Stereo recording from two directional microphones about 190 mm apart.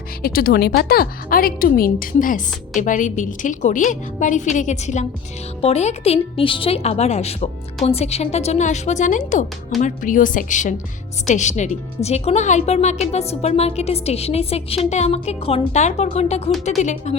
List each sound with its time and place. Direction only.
0.2 s a woman's voice: 50° left (ahead or behind)